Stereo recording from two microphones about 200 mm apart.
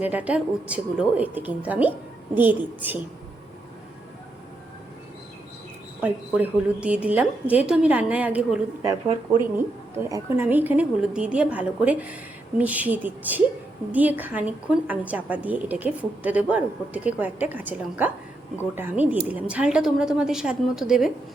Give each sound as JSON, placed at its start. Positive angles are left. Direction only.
{"t": 0.0, "sound": "a woman's voice", "side_deg": -10}
{"t": 6.0, "sound": "a woman's voice", "side_deg": -5}
{"t": 8.8, "sound": "a woman's voice", "side_deg": -20}